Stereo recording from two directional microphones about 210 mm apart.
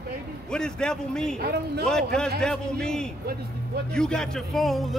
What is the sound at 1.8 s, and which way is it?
Speech, 5° left (ahead or behind).